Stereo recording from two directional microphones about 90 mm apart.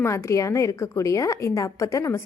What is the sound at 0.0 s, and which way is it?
A woman's voice, 30° left (ahead or behind).